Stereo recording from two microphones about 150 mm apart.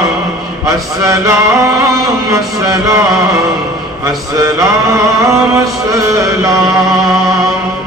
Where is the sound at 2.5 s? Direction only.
25° right (ahead or behind).